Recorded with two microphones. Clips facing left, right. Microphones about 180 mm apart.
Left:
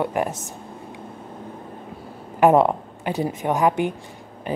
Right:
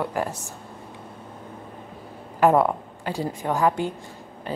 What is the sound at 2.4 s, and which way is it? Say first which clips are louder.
A woman's voice: left 3 dB; 20° left (ahead or behind).